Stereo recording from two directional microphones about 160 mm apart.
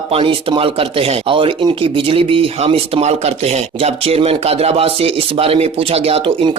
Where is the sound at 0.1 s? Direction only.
35° right (ahead or behind).